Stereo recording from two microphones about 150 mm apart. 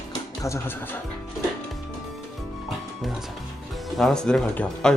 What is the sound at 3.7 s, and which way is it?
Speech, centre (ahead or behind).